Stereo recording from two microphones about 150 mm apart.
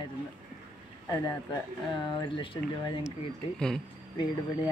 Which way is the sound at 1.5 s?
30° left (ahead or behind).